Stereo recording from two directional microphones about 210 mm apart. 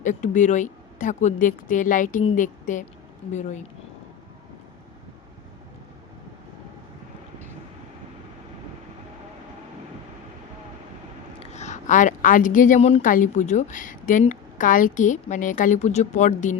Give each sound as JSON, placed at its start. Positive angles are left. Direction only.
{"t": 0.0, "sound": "a woman's voice", "side_deg": 35}
{"t": 11.3, "sound": "a woman's voice", "side_deg": 35}